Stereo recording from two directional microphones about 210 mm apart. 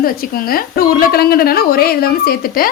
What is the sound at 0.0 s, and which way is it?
A woman's voice, 45° left (ahead or behind).